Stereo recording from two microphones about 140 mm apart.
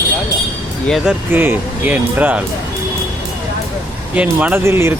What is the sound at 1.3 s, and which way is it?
Speech, 15° right (ahead or behind).